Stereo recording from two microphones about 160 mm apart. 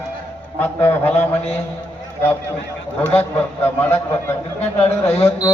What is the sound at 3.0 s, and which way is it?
A man's voice, 10° left (ahead or behind).